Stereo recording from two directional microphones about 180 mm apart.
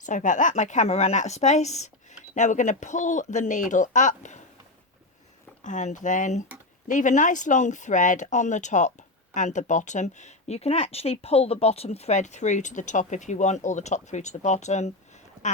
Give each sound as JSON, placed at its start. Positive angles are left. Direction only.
{"t": 0.0, "sound": "speech", "side_deg": 45}
{"t": 5.6, "sound": "speech", "side_deg": 45}